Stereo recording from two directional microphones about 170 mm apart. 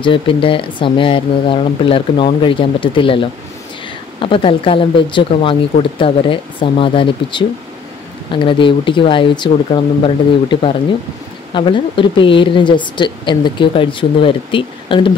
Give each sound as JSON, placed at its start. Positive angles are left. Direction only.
{"t": 0.0, "sound": "a woman's voice", "side_deg": 30}